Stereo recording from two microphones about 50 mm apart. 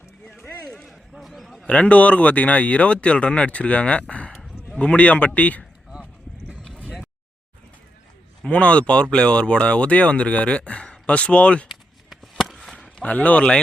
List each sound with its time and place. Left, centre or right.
0.3 s run: centre
0.9 s a sound: centre
1.6 s speech: left
8.4 s speech: left
11.7 s a sound: centre
13.1 s speech: left